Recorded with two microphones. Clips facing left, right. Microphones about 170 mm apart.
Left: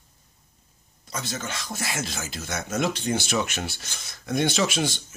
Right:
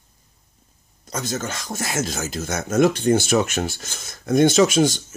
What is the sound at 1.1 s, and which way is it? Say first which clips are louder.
Speech: right 6 dB; 45° right (ahead or behind).